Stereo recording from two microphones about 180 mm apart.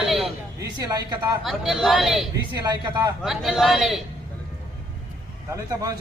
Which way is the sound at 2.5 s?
20° right (ahead or behind).